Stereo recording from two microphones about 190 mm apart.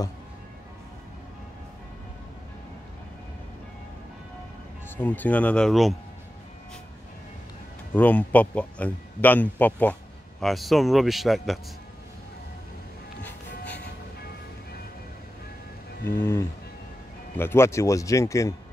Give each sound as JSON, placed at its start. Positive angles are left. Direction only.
{"t": 4.8, "sound": "speech", "side_deg": 10}
{"t": 7.9, "sound": "speech", "side_deg": 10}
{"t": 16.1, "sound": "speech", "side_deg": 10}